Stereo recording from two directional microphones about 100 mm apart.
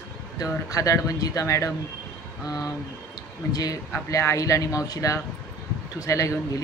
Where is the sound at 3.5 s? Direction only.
40° left (ahead or behind).